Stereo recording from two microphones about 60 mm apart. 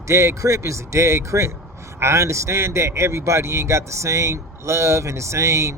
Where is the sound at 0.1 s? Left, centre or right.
Right.